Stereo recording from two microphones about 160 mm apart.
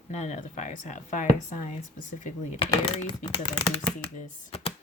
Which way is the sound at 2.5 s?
35° left (ahead or behind).